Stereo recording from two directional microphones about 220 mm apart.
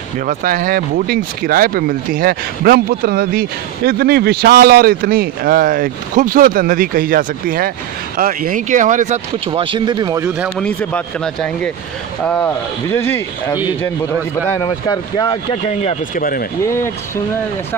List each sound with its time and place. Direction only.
0.3 s speech: 40° right (ahead or behind); by 10.2 s 20° right (ahead or behind)
10.6 s speech: 5° left (ahead or behind)
12.3 s speech: 5° left (ahead or behind)
15.8 s speech: 35° left (ahead or behind)